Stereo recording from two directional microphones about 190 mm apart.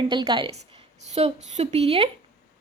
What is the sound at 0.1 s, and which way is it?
A woman's voice, 25° right (ahead or behind).